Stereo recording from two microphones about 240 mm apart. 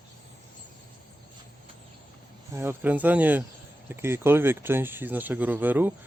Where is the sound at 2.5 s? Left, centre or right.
Centre.